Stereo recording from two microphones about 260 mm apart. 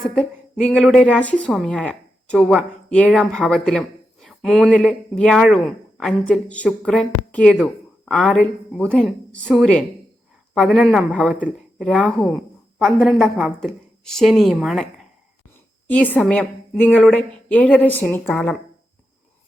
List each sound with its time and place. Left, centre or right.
0.0 s a woman's voice: centre